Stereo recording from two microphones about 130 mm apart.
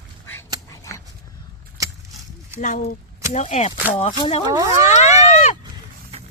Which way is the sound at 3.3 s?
60° left (ahead or behind).